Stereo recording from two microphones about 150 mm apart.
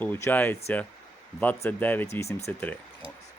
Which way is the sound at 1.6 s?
10° left (ahead or behind).